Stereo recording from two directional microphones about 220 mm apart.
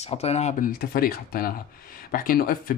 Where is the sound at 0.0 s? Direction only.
30° left (ahead or behind).